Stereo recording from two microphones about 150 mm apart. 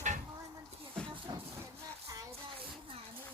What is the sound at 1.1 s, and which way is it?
Music, 35° right (ahead or behind).